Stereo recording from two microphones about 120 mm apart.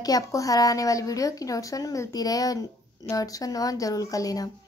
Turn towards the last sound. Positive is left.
turn(degrees=30)  # may be behind; listen again after turning